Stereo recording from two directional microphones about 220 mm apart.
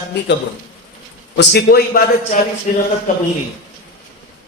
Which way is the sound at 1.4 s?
45° left (ahead or behind).